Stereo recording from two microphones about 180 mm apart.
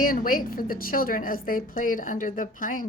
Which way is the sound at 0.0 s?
50° left (ahead or behind).